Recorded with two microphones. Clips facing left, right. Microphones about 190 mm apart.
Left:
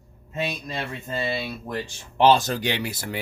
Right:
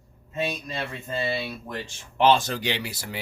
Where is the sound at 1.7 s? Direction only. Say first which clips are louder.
Left 4 dB; 35° left (ahead or behind).